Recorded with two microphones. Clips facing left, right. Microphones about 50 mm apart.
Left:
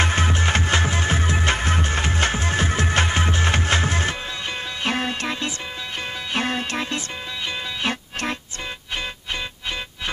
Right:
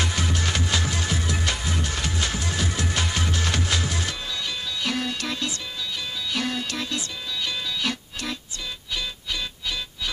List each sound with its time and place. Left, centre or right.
0.0 s music: left